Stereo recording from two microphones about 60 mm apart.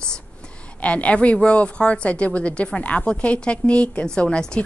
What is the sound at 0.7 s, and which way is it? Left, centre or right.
A woman's voice, left.